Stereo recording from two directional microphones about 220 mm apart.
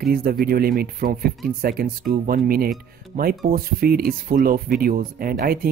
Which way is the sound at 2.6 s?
Centre (ahead or behind).